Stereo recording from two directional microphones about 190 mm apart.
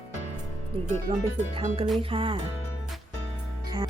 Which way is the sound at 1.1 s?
25° right (ahead or behind).